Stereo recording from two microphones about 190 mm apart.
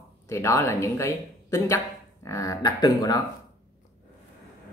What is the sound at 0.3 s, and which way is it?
Speech, 15° left (ahead or behind).